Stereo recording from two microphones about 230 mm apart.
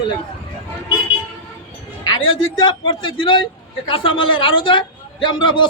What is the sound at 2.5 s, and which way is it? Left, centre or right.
A man's voice, left.